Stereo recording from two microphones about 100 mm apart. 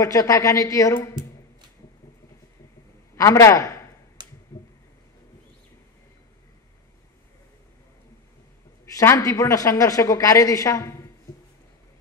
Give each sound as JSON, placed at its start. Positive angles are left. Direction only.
{"t": 0.0, "sound": "a woman's voice", "side_deg": 35}
{"t": 3.2, "sound": "a woman's voice", "side_deg": 30}
{"t": 4.2, "sound": "a sound", "side_deg": -45}
{"t": 9.1, "sound": "a woman's voice", "side_deg": 35}